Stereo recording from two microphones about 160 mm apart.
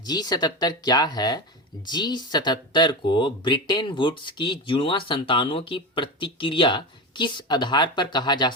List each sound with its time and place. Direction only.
0.0 s speech: 25° left (ahead or behind)